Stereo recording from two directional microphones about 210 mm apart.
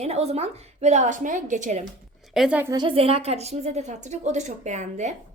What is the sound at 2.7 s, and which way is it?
A woman's voice, 25° right (ahead or behind).